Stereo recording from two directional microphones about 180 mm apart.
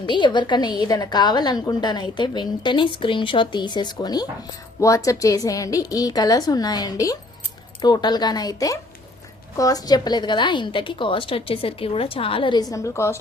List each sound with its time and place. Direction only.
0.0 s a woman's voice: 25° left (ahead or behind)
12.7 s a woman's voice: 15° left (ahead or behind)